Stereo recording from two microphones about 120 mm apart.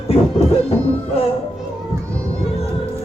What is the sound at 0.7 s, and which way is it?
Music, 55° left (ahead or behind).